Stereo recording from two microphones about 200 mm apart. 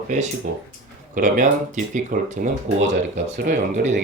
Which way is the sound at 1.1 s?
40° right (ahead or behind).